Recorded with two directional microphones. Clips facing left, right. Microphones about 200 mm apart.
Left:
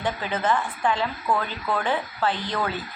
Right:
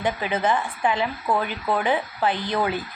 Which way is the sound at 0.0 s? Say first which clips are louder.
Right 3 dB; 15° right (ahead or behind).